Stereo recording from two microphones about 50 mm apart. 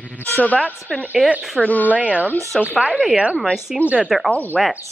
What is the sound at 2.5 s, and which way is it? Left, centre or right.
Speech, centre.